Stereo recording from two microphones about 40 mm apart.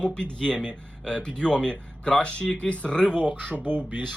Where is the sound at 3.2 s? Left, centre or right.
Right.